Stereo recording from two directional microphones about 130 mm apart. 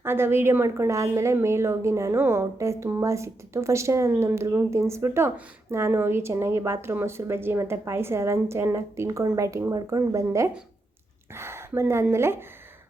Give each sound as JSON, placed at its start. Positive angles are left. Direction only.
{"t": 0.0, "sound": "a woman's voice", "side_deg": -20}